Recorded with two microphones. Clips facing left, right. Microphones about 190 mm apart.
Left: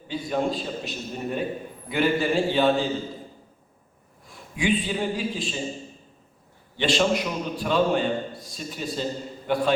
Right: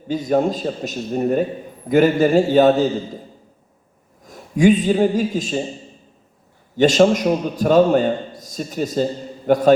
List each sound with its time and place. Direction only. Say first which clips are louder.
0.1 s a man's voice: right 8 dB; 45° right (ahead or behind)
4.2 s a man's voice: right 13 dB; 45° right (ahead or behind)
6.7 s a man's voice: right 9 dB; 45° right (ahead or behind)